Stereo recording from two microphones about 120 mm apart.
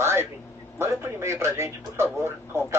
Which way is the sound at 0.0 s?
20° right (ahead or behind).